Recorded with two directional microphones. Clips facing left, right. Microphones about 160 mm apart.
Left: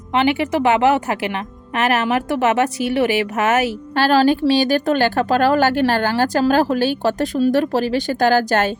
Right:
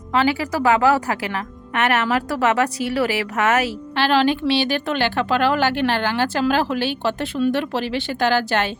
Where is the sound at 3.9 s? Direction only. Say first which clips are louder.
Left 3 dB; 40° left (ahead or behind).